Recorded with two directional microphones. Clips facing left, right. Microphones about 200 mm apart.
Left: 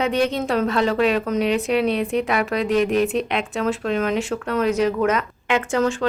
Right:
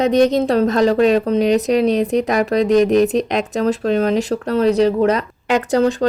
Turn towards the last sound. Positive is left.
turn(degrees=-35)  # may be behind; listen again after turning